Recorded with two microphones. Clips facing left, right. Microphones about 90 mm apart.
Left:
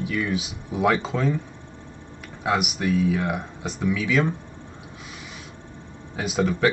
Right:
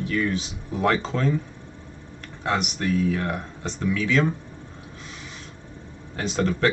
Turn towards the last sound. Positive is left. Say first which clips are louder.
# left 1 dB
turn(degrees=5)  # may be behind; listen again after turning